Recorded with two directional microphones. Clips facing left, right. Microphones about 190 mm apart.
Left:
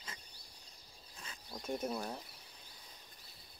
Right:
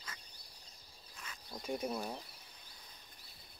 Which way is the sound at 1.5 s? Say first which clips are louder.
Even; centre (ahead or behind).